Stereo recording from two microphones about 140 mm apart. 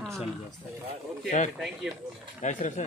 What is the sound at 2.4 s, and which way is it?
Speech, 60° left (ahead or behind).